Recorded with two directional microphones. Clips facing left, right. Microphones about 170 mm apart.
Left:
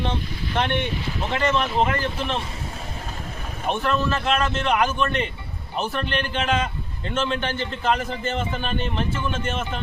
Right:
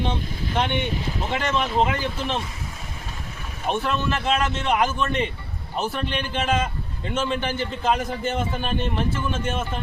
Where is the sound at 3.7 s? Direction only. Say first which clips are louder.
Left 1 dB; 5° right (ahead or behind).